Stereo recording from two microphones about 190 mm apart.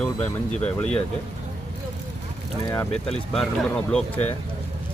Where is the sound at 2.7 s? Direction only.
10° left (ahead or behind).